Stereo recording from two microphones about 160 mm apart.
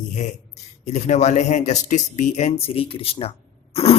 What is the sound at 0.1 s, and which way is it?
Speech, 45° left (ahead or behind).